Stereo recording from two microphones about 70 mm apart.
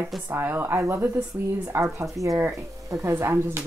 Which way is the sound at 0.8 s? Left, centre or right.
Right.